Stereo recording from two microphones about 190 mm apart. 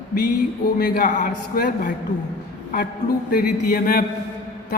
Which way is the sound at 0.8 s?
45° left (ahead or behind).